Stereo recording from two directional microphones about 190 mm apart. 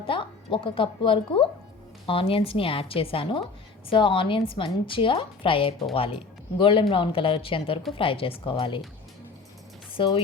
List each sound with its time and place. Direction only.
0.0 s a woman's voice: 25° left (ahead or behind)
9.9 s speech: 25° left (ahead or behind)